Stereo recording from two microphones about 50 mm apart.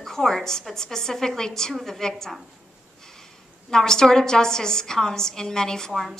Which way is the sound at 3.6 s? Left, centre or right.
Centre.